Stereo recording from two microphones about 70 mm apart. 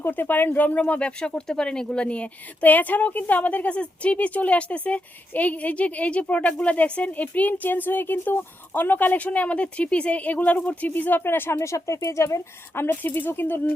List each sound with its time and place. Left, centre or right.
0.0 s speech: left
11.6 s speech: left